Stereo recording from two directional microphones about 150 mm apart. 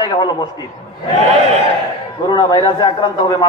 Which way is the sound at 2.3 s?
30° left (ahead or behind).